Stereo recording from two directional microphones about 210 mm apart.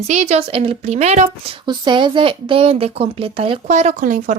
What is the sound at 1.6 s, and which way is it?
A woman's voice, 20° right (ahead or behind).